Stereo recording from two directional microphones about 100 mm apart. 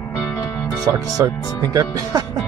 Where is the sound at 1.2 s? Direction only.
30° right (ahead or behind).